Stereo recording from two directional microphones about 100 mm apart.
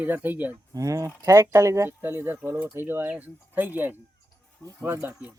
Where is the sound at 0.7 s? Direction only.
35° right (ahead or behind); by 5.3 s 15° right (ahead or behind).